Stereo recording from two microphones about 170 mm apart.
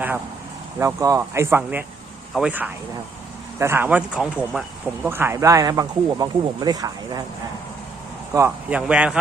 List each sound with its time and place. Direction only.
0.8 s speech: 15° right (ahead or behind)
8.3 s speech: 15° right (ahead or behind)